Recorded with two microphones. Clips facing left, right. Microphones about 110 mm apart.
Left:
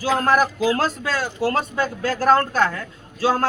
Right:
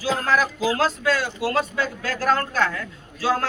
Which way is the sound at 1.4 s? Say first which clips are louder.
Left 2 dB; 35° left (ahead or behind).